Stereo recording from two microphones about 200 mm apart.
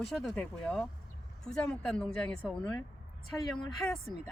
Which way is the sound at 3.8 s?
10° left (ahead or behind).